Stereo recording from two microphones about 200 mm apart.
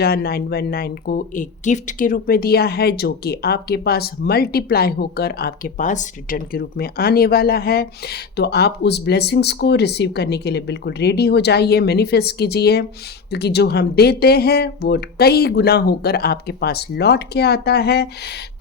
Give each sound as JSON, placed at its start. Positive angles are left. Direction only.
{"t": 0.0, "sound": "speech", "side_deg": 50}